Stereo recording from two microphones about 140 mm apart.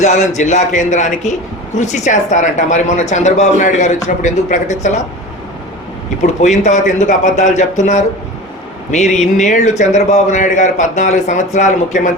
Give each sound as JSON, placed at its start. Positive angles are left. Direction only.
{"t": 0.0, "sound": "a man's voice", "side_deg": 60}
{"t": 6.2, "sound": "a man's voice", "side_deg": 55}